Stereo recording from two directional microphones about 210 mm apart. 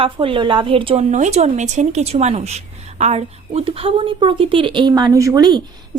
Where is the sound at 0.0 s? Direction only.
25° right (ahead or behind).